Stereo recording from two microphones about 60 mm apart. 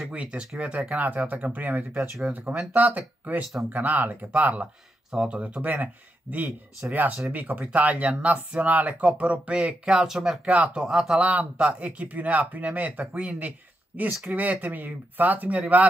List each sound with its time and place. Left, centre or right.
0.1 s speech: centre
5.1 s speech: centre
5.4 s speech: right; by 10.4 s centre
10.4 s speech: right
10.8 s speech: centre
11.1 s speech: right